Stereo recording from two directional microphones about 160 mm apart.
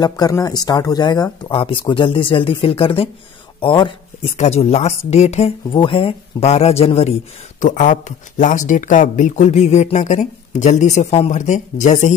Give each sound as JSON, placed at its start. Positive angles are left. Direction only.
{"t": 0.0, "sound": "speech", "side_deg": 25}
{"t": 4.4, "sound": "speech", "side_deg": 40}
{"t": 7.6, "sound": "speech", "side_deg": 50}